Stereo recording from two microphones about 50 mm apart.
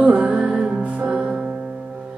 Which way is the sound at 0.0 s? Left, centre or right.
Right.